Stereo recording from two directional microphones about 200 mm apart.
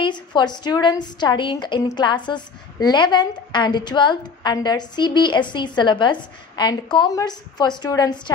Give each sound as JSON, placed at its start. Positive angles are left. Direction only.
{"t": 0.0, "sound": "a woman's voice", "side_deg": 20}